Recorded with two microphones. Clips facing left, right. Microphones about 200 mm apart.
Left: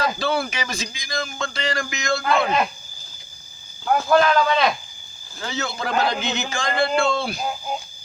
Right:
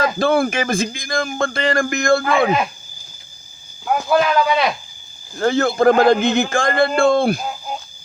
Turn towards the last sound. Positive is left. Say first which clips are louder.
# right 7 dB
turn(degrees=-50)  # may be behind; listen again after turning